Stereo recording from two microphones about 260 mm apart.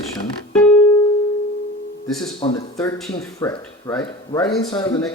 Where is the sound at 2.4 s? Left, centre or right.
Centre.